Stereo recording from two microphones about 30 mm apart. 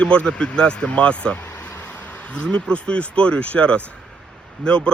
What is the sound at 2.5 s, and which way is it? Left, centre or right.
A man's voice, left.